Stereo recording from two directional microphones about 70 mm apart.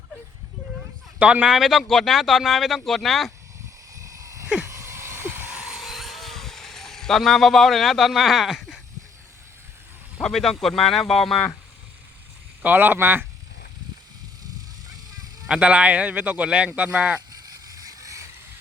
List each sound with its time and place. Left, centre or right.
1.2 s a man's voice: centre
1.5 s speech: centre
3.9 s a sound: right
5.5 s a sound: centre
10.2 s speech: centre
12.6 s speech: right
15.4 s a man's voice: centre
17.7 s vehicle: right